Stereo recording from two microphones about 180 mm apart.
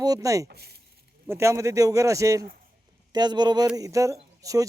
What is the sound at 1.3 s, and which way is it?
Speech, 15° right (ahead or behind).